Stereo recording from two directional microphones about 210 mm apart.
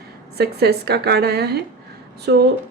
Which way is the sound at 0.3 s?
50° right (ahead or behind).